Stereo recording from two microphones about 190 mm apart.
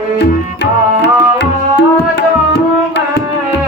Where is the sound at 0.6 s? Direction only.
65° left (ahead or behind).